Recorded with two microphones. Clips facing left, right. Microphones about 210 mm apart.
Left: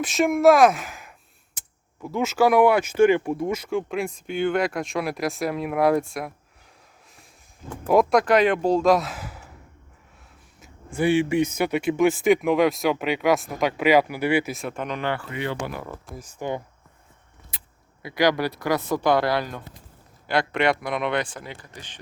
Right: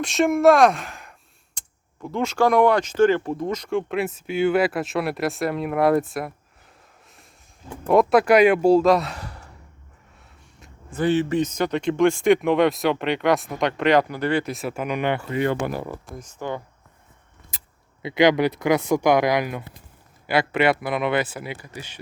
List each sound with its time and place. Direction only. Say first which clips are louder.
0.0 s speech: right 1 dB; centre (ahead or behind)
7.9 s speech: right 2 dB; centre (ahead or behind)
10.6 s speech: even; 10° left (ahead or behind); by 15.3 s 20° right (ahead or behind)
15.3 s speech: right 6 dB; 50° right (ahead or behind)
16.1 s speech: left 2 dB; 10° left (ahead or behind)
18.0 s speech: right 4 dB; 20° right (ahead or behind)